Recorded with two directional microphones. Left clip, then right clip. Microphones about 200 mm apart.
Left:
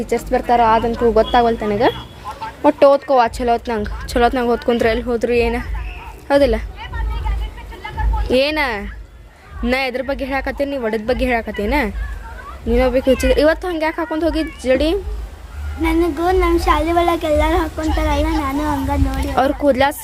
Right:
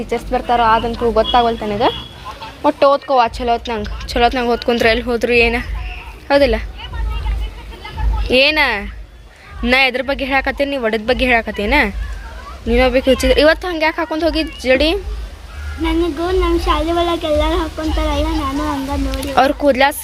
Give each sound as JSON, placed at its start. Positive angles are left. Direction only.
{"t": 0.1, "sound": "speech", "side_deg": 25}
{"t": 8.3, "sound": "a woman's voice", "side_deg": 10}
{"t": 19.3, "sound": "a woman's voice", "side_deg": 5}